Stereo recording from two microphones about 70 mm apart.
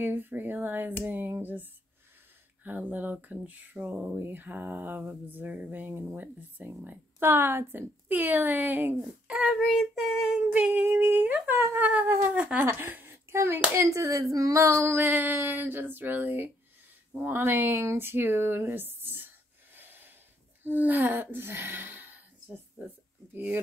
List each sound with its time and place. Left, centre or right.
0.0 s speech: right
9.0 s child singing: centre
10.5 s speech: right
11.7 s speech: right
13.7 s speech: right